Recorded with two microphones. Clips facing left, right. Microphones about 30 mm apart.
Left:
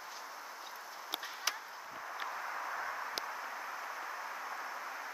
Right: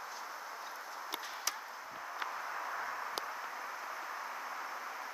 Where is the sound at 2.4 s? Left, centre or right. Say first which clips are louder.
Even; centre.